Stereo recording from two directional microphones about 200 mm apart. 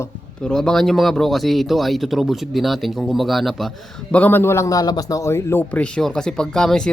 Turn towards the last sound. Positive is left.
turn(degrees=5)  # may be behind; listen again after turning